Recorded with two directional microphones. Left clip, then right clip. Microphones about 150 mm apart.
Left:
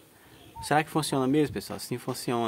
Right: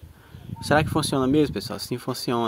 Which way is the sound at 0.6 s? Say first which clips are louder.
Right 4 dB; 25° right (ahead or behind).